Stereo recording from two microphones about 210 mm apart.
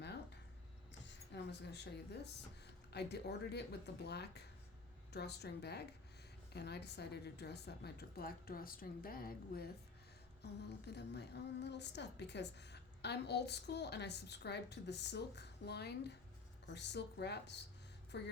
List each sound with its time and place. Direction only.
1.0 s a woman's voice: 55° left (ahead or behind)